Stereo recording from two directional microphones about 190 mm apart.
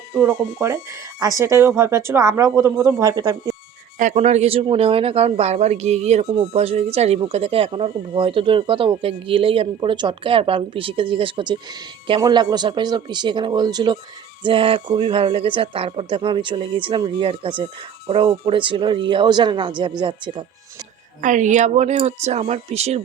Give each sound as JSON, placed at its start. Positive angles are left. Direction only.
{"t": 0.1, "sound": "speech", "side_deg": -15}
{"t": 3.9, "sound": "speech", "side_deg": -40}
{"t": 21.2, "sound": "speech", "side_deg": -40}